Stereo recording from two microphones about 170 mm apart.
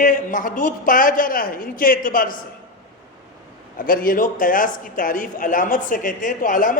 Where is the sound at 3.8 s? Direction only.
55° left (ahead or behind).